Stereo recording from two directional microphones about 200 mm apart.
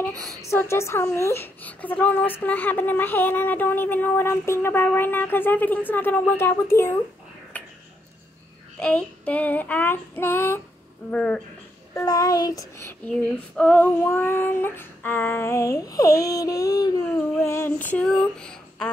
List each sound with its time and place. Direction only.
0.1 s a woman's voice: 15° right (ahead or behind)
0.4 s speech: 15° left (ahead or behind)
7.5 s a sound: 10° left (ahead or behind)
8.7 s speech: 5° left (ahead or behind)
11.9 s speech: 20° left (ahead or behind)
13.1 s speech: 5° left (ahead or behind)